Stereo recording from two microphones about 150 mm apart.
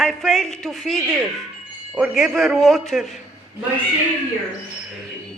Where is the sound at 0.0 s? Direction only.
Centre (ahead or behind).